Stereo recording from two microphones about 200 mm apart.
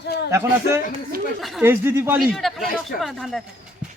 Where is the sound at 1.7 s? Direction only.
10° right (ahead or behind).